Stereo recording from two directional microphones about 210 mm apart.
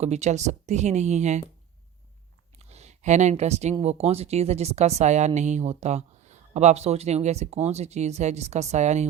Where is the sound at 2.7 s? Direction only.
30° right (ahead or behind).